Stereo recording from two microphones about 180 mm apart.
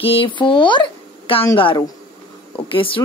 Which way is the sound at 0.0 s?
30° left (ahead or behind).